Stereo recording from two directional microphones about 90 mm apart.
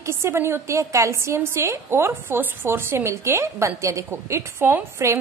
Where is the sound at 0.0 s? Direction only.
30° right (ahead or behind).